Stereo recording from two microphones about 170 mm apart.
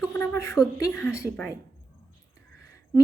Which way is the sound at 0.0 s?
15° left (ahead or behind).